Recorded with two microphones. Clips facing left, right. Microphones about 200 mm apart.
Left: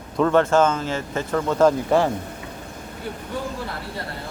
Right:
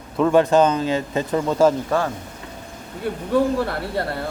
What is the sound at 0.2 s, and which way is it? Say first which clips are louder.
Speech: right 2 dB; 10° right (ahead or behind).